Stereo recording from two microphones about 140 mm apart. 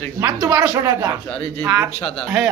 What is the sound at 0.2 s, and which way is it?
Speech, 25° right (ahead or behind).